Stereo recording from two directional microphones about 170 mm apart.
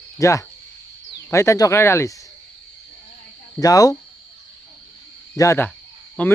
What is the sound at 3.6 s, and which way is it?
Speech, 20° left (ahead or behind).